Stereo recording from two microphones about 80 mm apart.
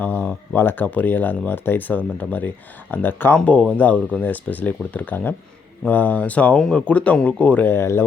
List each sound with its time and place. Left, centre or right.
0.0 s speech: left
3.3 s speech: centre; by 8.0 s left